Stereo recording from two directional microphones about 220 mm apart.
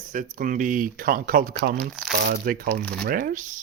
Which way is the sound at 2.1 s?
45° right (ahead or behind).